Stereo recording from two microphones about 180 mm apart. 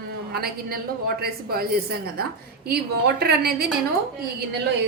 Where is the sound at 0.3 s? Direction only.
60° right (ahead or behind).